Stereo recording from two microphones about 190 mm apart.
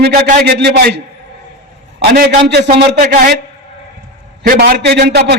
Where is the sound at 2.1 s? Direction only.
60° right (ahead or behind).